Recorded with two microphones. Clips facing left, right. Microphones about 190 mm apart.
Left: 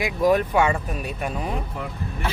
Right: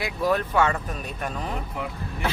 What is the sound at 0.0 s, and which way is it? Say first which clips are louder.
Speech: left 5 dB; 15° left (ahead or behind).